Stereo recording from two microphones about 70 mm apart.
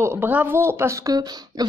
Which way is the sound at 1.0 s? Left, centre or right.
Right.